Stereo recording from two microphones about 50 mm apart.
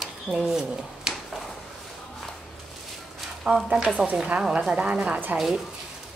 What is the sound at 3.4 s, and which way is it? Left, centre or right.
Speech, centre.